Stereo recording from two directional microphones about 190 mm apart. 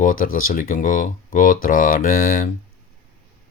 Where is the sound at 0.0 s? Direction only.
45° left (ahead or behind).